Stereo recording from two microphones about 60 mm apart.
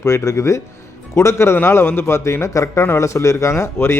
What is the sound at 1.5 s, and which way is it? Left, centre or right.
A man's voice, left.